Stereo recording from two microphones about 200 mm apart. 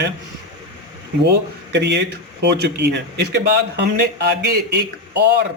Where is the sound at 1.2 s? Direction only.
60° right (ahead or behind).